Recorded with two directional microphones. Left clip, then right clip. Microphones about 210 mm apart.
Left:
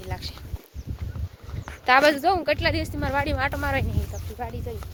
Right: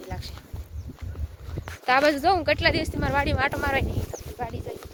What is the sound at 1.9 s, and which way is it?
Speech, 5° right (ahead or behind).